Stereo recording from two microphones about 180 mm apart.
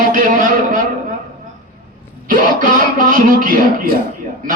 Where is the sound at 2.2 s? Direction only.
50° right (ahead or behind).